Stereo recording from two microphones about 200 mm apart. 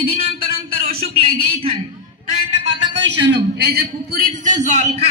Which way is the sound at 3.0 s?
60° right (ahead or behind).